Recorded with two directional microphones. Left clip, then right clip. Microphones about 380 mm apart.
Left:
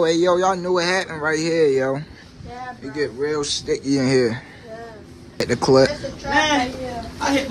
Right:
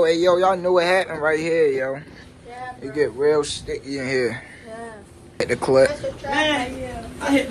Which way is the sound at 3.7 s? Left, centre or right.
Centre.